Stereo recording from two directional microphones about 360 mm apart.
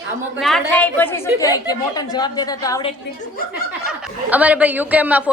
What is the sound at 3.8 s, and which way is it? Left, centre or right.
A woman's voice, centre.